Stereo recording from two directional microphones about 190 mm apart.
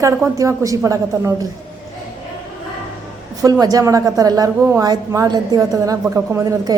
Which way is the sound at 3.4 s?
20° right (ahead or behind).